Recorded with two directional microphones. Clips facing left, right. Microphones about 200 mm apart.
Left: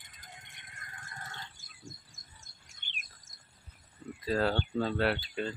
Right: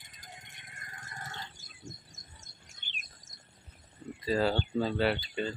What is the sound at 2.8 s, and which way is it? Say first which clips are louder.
Bird: left 1 dB; 55° left (ahead or behind).